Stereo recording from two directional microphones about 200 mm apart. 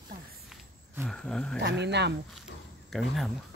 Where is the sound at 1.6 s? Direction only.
60° right (ahead or behind).